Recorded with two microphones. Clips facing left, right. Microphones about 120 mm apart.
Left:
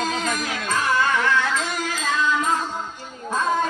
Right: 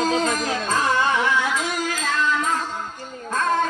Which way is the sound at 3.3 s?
10° left (ahead or behind).